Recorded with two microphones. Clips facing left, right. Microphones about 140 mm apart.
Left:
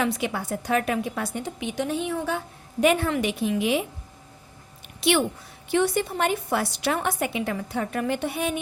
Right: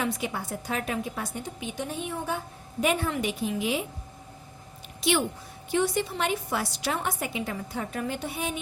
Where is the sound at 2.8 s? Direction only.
70° left (ahead or behind).